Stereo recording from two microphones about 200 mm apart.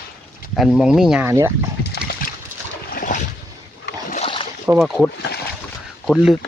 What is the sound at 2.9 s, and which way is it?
Boat, 40° left (ahead or behind).